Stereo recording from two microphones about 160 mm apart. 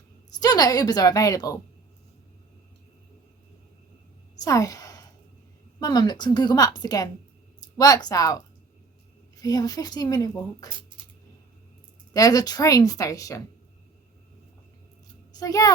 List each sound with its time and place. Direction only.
0.3 s a woman's voice: 25° left (ahead or behind)
4.4 s a woman's voice: 20° left (ahead or behind)
9.4 s a woman's voice: 25° left (ahead or behind)
12.1 s a woman's voice: 20° left (ahead or behind)
15.3 s speech: 25° left (ahead or behind)